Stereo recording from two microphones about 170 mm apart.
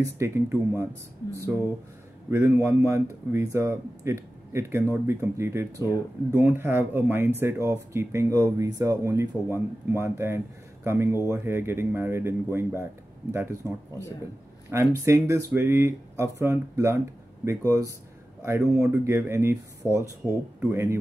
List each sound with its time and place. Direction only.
0.0 s speech: 15° right (ahead or behind)
2.3 s speech: 15° right (ahead or behind)